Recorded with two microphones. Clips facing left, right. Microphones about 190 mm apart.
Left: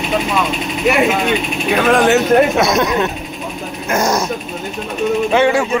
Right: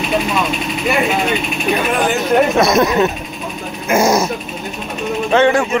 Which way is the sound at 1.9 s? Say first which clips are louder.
Left 5 dB; 80° left.